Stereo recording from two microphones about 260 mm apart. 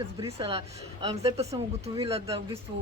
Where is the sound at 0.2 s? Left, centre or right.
Right.